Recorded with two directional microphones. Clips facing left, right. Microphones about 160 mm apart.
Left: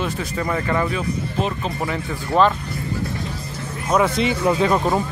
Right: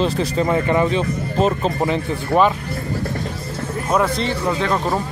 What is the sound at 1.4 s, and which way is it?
Speech, 40° right (ahead or behind).